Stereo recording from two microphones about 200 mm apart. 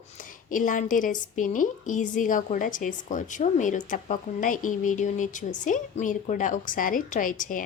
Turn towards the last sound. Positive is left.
turn(degrees=40)  # may be behind; listen again after turning